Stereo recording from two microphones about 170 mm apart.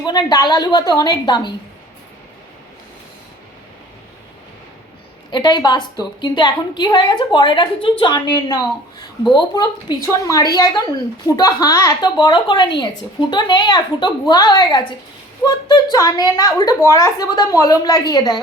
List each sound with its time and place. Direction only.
0.0 s a woman's voice: 25° left (ahead or behind)
5.3 s a woman's voice: 25° left (ahead or behind)